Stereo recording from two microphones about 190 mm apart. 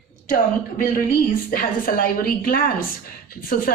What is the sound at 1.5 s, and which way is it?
A woman's voice, 45° left (ahead or behind).